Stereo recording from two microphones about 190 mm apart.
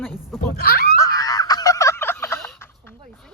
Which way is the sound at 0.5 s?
55° left (ahead or behind).